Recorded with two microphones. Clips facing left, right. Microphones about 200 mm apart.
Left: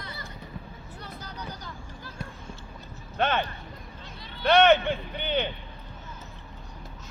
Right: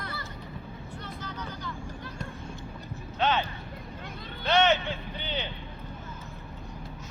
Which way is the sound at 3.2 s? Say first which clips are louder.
Left 1 dB; 55° left (ahead or behind).